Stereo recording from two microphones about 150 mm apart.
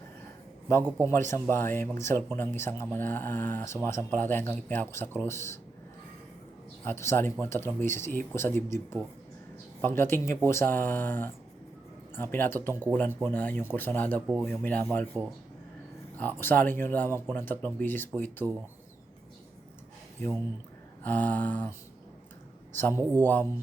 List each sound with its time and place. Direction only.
0.9 s speech: 15° left (ahead or behind)
6.8 s speech: 15° left (ahead or behind)
16.1 s speech: 10° left (ahead or behind)
21.0 s speech: 10° left (ahead or behind)